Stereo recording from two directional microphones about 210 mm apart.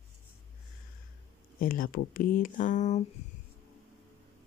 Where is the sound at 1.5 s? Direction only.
40° left (ahead or behind).